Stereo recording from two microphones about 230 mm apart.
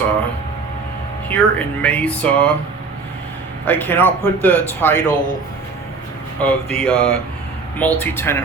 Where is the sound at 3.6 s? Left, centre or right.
Centre.